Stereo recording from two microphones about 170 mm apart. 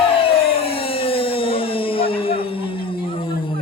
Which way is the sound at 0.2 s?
35° left (ahead or behind).